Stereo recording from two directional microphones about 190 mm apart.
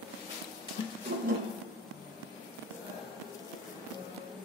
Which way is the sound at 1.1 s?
55° right (ahead or behind).